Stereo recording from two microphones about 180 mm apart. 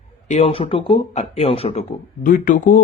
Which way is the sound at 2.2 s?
50° left (ahead or behind).